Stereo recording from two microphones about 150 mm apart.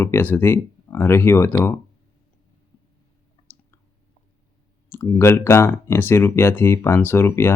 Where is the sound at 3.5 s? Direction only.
15° left (ahead or behind).